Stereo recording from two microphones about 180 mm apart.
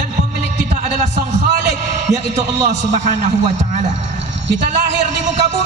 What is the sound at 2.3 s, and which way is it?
A man's voice, 40° right (ahead or behind).